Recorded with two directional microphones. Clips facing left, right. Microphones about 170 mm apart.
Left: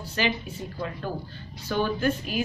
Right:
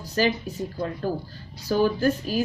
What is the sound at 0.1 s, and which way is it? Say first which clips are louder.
A woman's voice: right 5 dB; 40° right (ahead or behind).